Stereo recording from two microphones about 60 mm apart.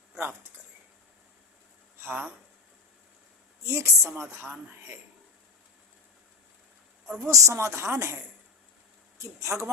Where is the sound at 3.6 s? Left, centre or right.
Right.